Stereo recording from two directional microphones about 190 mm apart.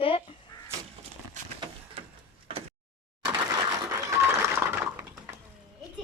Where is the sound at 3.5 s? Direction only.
20° right (ahead or behind).